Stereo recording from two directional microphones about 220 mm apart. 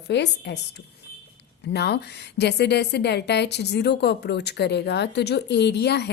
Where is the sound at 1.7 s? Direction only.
50° left (ahead or behind).